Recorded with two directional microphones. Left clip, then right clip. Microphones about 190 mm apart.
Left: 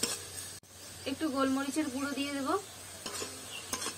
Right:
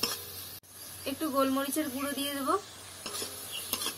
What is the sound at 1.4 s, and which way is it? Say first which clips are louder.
Speech: right 3 dB; 30° right (ahead or behind).